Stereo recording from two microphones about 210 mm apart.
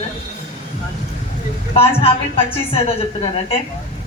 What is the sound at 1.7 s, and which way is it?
A woman's voice, 30° left (ahead or behind).